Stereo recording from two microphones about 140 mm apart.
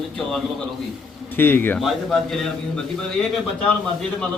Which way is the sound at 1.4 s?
15° left (ahead or behind).